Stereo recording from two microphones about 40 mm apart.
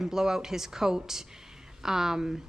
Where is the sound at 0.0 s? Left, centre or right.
Centre.